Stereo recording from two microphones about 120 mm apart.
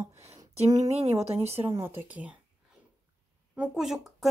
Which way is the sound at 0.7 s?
60° right (ahead or behind).